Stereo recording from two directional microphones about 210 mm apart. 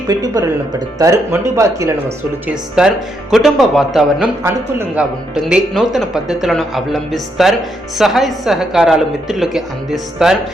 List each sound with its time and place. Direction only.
0.1 s speech: 15° right (ahead or behind)
2.7 s speech: centre (ahead or behind)